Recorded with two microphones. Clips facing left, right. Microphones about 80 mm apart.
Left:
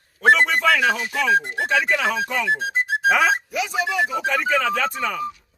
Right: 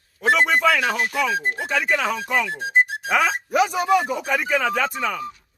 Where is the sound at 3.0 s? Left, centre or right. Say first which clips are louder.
Left 3 dB; centre.